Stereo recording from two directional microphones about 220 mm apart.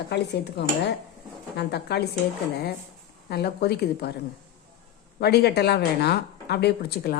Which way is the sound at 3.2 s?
45° left (ahead or behind).